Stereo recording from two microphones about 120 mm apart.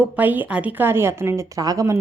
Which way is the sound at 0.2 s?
15° right (ahead or behind).